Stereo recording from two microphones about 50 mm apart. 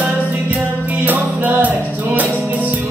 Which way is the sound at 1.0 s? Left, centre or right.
Right.